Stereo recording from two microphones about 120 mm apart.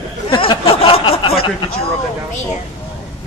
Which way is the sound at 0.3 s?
45° left (ahead or behind).